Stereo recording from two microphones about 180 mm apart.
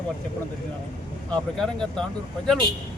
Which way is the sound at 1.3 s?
5° left (ahead or behind).